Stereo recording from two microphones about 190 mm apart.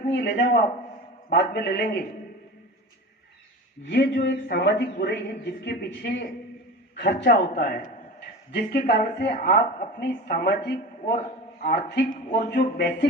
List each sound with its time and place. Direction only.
0.1 s a man's voice: 70° left (ahead or behind)
3.8 s a woman's voice: 65° left (ahead or behind)
8.5 s a woman's voice: 60° left (ahead or behind)